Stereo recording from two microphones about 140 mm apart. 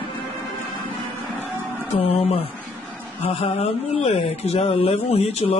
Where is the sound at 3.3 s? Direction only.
45° left (ahead or behind).